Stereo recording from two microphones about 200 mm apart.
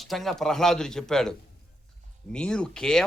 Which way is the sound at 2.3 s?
5° left (ahead or behind).